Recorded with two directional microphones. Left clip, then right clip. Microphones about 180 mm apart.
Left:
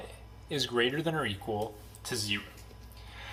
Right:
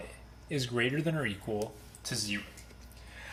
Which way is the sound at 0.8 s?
15° right (ahead or behind).